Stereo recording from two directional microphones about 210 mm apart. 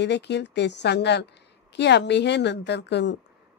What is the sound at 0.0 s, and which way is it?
A woman's voice, 55° left (ahead or behind).